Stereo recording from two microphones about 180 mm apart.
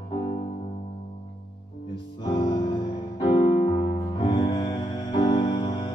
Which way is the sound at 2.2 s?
25° left (ahead or behind).